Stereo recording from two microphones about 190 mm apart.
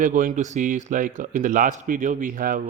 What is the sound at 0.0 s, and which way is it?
Speech, 45° right (ahead or behind).